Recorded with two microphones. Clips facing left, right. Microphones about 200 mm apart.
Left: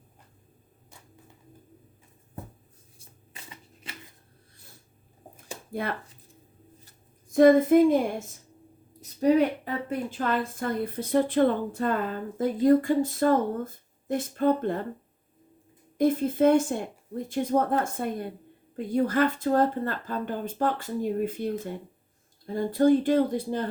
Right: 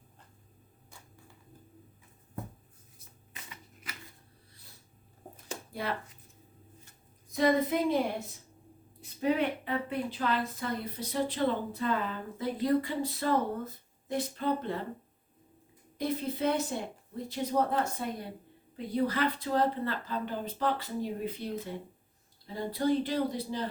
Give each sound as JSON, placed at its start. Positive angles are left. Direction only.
{"t": 3.0, "sound": "shuffling cards", "side_deg": 30}
{"t": 5.8, "sound": "a woman's voice", "side_deg": 50}
{"t": 7.3, "sound": "a woman's voice", "side_deg": 50}
{"t": 16.0, "sound": "a woman's voice", "side_deg": 50}